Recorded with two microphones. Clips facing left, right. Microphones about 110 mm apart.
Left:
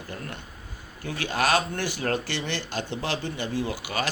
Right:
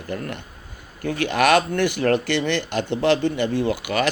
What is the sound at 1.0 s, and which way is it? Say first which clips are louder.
Speech: right 7 dB; 65° right (ahead or behind).